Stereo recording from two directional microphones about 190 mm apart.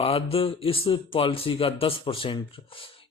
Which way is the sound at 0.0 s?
30° left (ahead or behind).